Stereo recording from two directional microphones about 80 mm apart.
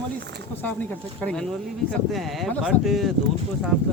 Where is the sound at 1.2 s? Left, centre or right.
Centre.